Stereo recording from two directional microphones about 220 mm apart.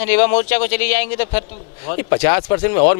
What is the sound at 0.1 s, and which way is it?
Speech, 10° left (ahead or behind).